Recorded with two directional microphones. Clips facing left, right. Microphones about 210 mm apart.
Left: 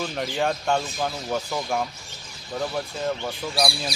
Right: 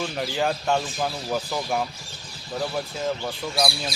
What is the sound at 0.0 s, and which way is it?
Speech, centre (ahead or behind).